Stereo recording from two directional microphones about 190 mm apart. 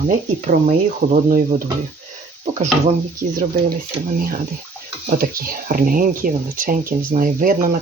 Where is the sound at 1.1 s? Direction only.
45° right (ahead or behind).